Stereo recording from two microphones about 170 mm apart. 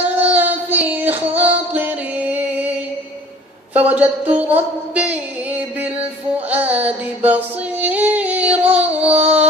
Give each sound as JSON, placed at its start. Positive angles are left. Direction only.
{"t": 0.0, "sound": "child singing", "side_deg": -10}
{"t": 1.3, "sound": "music", "side_deg": -10}
{"t": 3.7, "sound": "a woman's voice", "side_deg": -10}
{"t": 4.6, "sound": "a sound", "side_deg": -10}
{"t": 6.5, "sound": "yodeling", "side_deg": -10}
{"t": 9.0, "sound": "a sound", "side_deg": -35}